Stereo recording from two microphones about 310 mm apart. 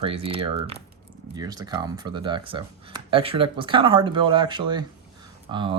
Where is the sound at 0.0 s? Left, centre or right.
Centre.